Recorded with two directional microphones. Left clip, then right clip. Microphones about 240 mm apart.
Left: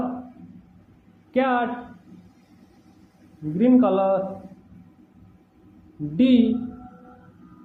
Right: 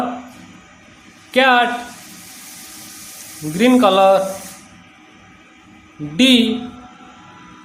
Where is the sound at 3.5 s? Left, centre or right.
Right.